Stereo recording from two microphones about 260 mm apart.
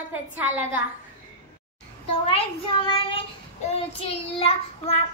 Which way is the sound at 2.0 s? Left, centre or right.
Centre.